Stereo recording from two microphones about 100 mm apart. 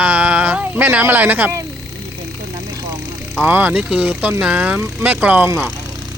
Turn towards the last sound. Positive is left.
turn(degrees=-25)  # may be behind; listen again after turning